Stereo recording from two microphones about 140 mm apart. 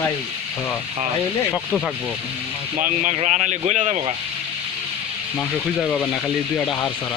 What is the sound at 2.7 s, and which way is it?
Speech, 70° right (ahead or behind).